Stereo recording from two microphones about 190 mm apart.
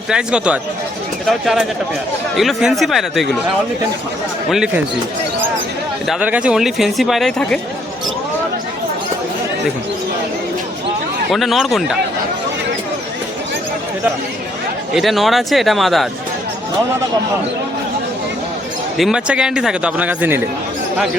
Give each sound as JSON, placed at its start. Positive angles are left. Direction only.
{"t": 0.1, "sound": "speech", "side_deg": -5}
{"t": 4.4, "sound": "speech", "side_deg": -5}
{"t": 6.1, "sound": "speech", "side_deg": -5}
{"t": 11.3, "sound": "speech", "side_deg": 0}
{"t": 14.9, "sound": "speech", "side_deg": 0}
{"t": 18.9, "sound": "speech", "side_deg": -5}